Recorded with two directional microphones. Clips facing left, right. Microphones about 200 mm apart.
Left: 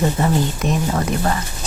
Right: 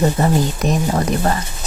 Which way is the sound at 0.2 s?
35° right (ahead or behind).